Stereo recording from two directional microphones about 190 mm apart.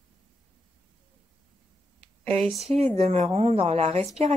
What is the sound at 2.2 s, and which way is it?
Speech, 30° right (ahead or behind).